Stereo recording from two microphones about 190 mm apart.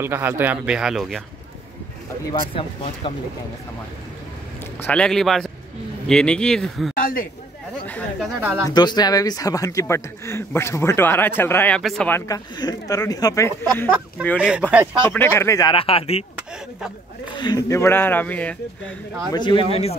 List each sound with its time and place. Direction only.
0.0 s speech: 10° right (ahead or behind)
2.5 s speech: 30° left (ahead or behind)
4.8 s speech: 5° left (ahead or behind)
7.0 s a sound: 45° left (ahead or behind)
7.8 s chatter: 10° left (ahead or behind)
8.4 s speech: 10° right (ahead or behind)
8.6 s speech: 20° left (ahead or behind); by 12.2 s 5° left (ahead or behind)
12.3 s speech: 20° left (ahead or behind)
13.8 s speech: 5° right (ahead or behind)
15.0 s speech: 10° left (ahead or behind); by 16.3 s 30° left (ahead or behind)
17.4 s speech: 20° left (ahead or behind)
19.3 s speech: 25° left (ahead or behind)